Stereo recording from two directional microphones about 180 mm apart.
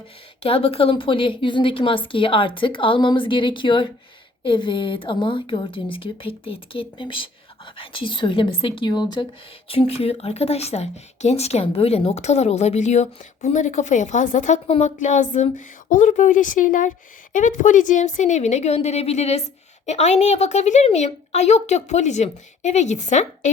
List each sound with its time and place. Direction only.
0.4 s a woman's voice: 30° left (ahead or behind)